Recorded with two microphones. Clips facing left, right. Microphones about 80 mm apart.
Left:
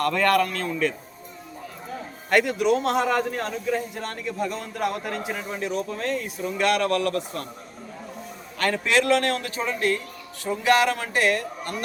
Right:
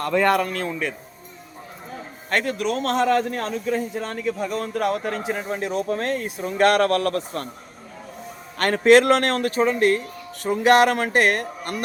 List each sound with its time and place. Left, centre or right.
0.0 s speech: centre
2.5 s a man's voice: centre
3.7 s speech: centre
5.5 s speech: right
8.5 s speech: right
10.4 s speech: right